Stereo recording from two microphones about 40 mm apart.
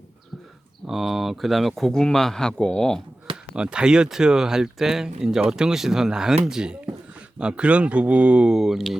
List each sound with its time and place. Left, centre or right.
0.9 s speech: centre
1.9 s speech: centre
3.5 s speech: right
8.5 s speech: centre